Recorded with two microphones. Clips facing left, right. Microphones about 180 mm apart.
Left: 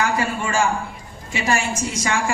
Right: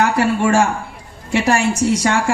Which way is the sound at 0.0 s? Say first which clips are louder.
Right 7 dB; 65° right (ahead or behind).